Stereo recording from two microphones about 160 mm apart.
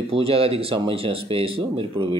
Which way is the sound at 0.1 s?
35° right (ahead or behind).